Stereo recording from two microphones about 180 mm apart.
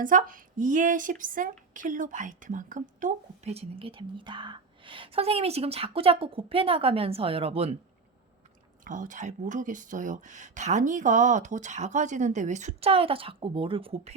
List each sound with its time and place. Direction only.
0.0 s a woman's voice: 50° right (ahead or behind)
8.8 s speech: 45° right (ahead or behind)